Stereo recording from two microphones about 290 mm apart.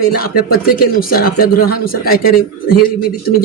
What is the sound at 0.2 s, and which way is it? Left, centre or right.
Speech, left.